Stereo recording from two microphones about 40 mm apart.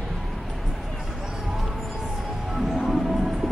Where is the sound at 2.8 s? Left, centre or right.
Centre.